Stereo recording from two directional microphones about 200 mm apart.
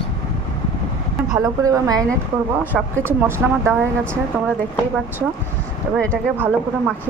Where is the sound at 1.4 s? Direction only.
20° right (ahead or behind).